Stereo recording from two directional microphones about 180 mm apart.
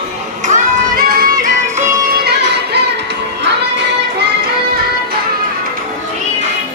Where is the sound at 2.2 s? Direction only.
65° right (ahead or behind).